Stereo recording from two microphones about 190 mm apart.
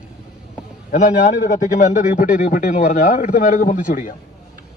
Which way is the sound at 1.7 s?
45° left (ahead or behind).